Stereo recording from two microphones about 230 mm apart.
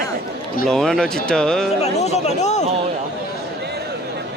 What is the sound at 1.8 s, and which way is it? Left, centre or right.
Speech, left.